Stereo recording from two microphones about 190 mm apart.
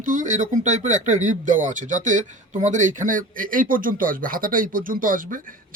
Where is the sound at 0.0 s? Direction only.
45° right (ahead or behind).